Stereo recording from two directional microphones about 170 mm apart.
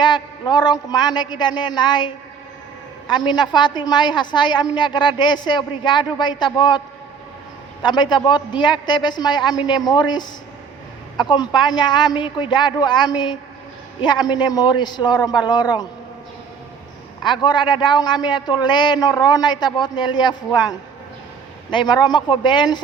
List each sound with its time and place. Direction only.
0.0 s a woman's voice: 25° left (ahead or behind)
17.2 s a woman's voice: 25° left (ahead or behind)